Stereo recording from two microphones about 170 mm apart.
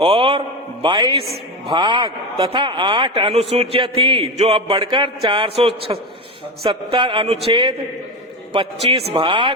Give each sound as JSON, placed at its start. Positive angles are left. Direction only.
{"t": 0.0, "sound": "a man's voice", "side_deg": -30}
{"t": 1.2, "sound": "a woman's voice", "side_deg": 0}
{"t": 1.7, "sound": "a man's voice", "side_deg": -25}